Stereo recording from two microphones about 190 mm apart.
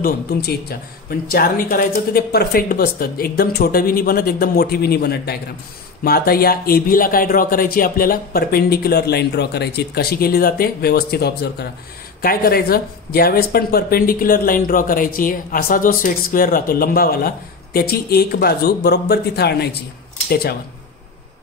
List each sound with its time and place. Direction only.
0.0 s speech: 55° left (ahead or behind)